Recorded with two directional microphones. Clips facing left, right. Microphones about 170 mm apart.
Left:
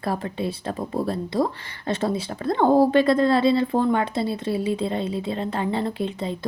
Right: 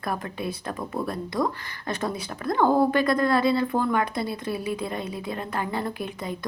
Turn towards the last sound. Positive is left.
turn(degrees=25)  # may be behind; listen again after turning